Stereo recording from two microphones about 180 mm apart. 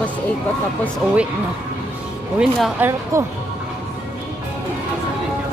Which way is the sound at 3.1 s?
15° right (ahead or behind).